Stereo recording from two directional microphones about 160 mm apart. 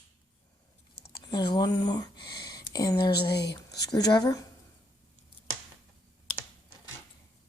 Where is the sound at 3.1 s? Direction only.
90° left.